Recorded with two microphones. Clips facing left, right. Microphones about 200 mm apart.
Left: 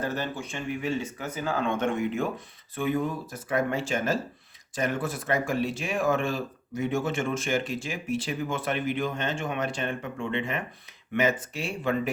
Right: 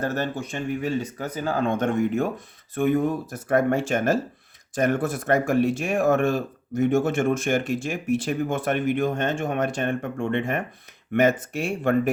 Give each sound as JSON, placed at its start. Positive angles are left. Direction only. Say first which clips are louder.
{"t": 0.0, "sound": "speech", "louder": "right 4 dB", "side_deg": -45}